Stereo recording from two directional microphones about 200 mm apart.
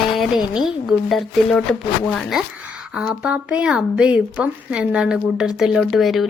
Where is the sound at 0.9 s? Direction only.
Centre (ahead or behind).